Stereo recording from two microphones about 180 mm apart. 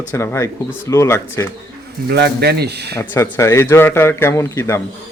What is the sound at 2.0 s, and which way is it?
Speech, 65° right (ahead or behind).